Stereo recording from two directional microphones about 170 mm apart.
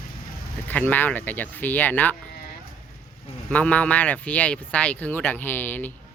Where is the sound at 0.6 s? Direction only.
10° left (ahead or behind).